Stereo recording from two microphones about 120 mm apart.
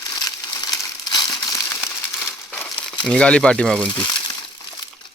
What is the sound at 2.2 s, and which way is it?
Crumpling, centre (ahead or behind).